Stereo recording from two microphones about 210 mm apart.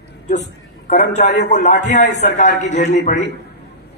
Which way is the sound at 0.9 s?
35° left (ahead or behind).